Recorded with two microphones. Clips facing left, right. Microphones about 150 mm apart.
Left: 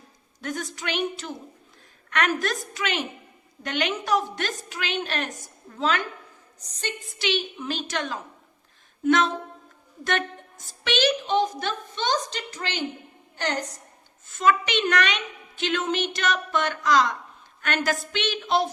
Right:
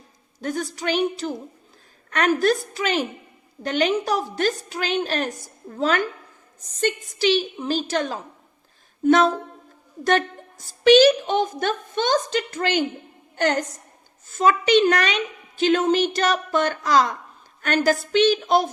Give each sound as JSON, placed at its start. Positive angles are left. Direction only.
{"t": 0.4, "sound": "a woman's voice", "side_deg": -35}
{"t": 7.2, "sound": "a woman's voice", "side_deg": -35}
{"t": 14.3, "sound": "a woman's voice", "side_deg": -40}